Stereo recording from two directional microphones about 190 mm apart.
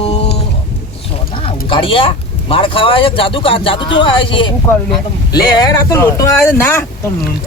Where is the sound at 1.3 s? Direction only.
30° left (ahead or behind).